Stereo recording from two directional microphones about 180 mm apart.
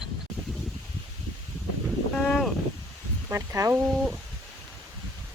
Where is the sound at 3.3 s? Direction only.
15° right (ahead or behind).